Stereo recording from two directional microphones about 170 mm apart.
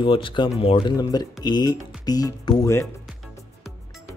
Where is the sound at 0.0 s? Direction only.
30° left (ahead or behind); by 2.9 s 15° left (ahead or behind).